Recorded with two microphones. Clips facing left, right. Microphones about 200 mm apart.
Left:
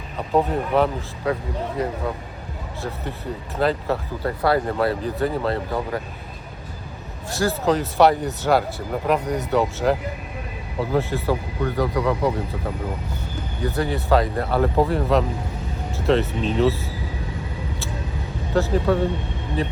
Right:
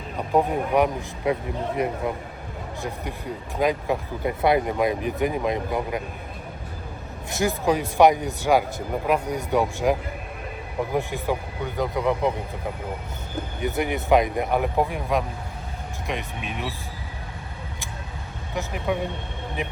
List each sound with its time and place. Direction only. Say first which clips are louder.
0.2 s speech: left 1 dB; 10° right (ahead or behind)
7.3 s speech: left 2 dB; 20° right (ahead or behind)
13.6 s speech: left 2 dB; 20° right (ahead or behind)
18.5 s speech: left 7 dB; 15° right (ahead or behind)